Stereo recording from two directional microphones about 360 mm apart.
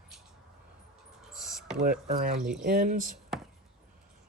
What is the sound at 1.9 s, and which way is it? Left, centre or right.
Speech, right.